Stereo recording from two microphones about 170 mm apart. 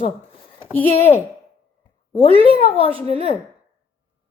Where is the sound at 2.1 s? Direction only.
30° right (ahead or behind).